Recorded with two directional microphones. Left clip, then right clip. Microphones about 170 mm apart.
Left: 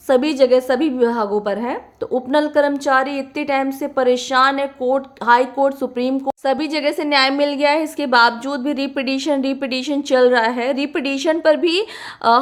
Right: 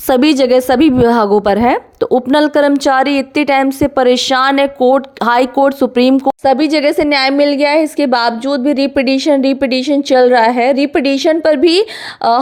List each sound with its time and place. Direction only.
0.1 s a woman's voice: 55° right (ahead or behind)
6.1 s a woman's voice: 25° right (ahead or behind)